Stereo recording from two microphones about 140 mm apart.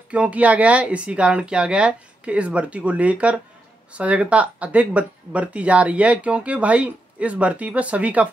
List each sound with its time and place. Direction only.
0.1 s speech: 10° right (ahead or behind)